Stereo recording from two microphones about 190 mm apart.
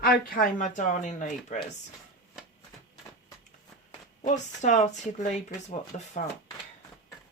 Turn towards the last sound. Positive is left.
turn(degrees=35)  # may be behind; listen again after turning